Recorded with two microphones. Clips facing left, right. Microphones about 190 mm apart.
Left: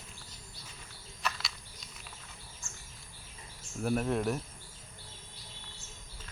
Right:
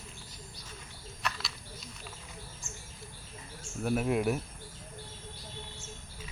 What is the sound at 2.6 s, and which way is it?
Bird, 15° right (ahead or behind).